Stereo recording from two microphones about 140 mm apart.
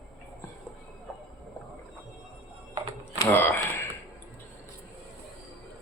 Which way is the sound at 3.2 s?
15° left (ahead or behind).